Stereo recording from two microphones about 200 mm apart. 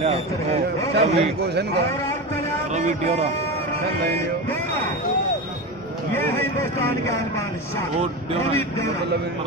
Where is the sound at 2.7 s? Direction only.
35° right (ahead or behind).